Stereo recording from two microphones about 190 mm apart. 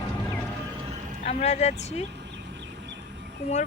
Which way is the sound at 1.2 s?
35° left (ahead or behind).